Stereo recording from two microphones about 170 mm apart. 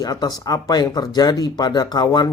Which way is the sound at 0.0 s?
25° left (ahead or behind).